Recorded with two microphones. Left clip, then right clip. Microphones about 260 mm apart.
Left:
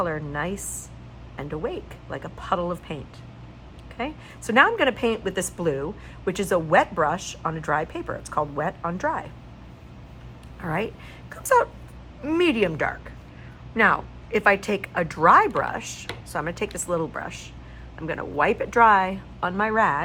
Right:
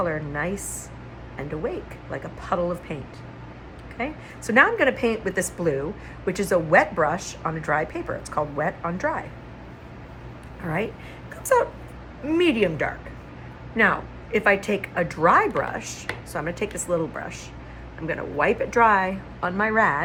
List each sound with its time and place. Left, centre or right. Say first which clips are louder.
0.0 s a woman's voice: right 1 dB; centre
10.6 s a woman's voice: even; centre